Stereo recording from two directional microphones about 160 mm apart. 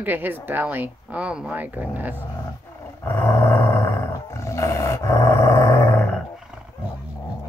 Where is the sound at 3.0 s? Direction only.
10° left (ahead or behind).